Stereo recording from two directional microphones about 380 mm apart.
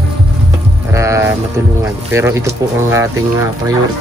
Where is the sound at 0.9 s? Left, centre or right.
Centre.